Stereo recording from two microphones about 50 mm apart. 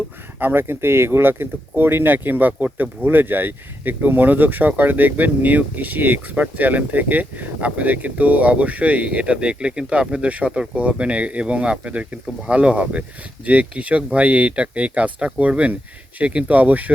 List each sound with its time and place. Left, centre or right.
0.3 s speech: right